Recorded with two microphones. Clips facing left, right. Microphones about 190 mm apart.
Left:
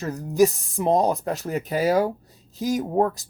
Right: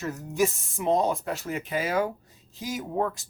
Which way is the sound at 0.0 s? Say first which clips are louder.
Left 7 dB; 40° left (ahead or behind).